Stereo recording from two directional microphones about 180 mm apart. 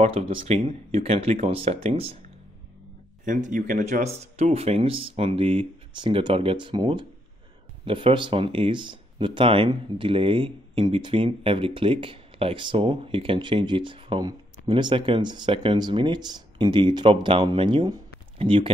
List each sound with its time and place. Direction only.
0.0 s speech: 30° right (ahead or behind)
3.3 s speech: 45° right (ahead or behind); by 18.7 s 30° right (ahead or behind)